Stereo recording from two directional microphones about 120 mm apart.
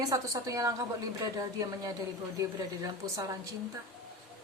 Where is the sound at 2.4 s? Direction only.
25° right (ahead or behind).